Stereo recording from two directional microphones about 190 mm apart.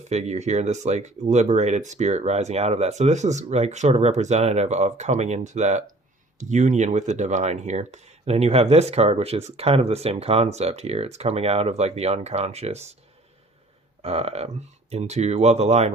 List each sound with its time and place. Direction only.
0.1 s speech: 35° right (ahead or behind)
14.0 s speech: 30° right (ahead or behind)